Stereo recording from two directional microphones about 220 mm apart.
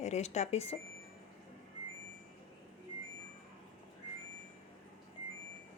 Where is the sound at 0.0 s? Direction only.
30° left (ahead or behind).